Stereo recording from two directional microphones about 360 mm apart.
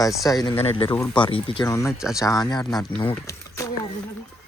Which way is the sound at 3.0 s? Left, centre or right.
Centre.